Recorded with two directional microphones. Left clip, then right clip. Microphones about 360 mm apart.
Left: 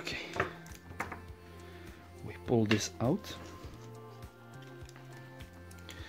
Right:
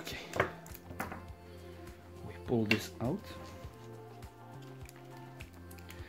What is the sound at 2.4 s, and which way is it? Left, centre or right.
Speech, centre.